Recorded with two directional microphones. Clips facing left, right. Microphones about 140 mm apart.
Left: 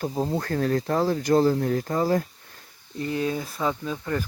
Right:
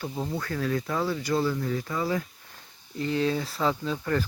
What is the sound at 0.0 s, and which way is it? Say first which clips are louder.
Speech: left 5 dB; 35° left (ahead or behind).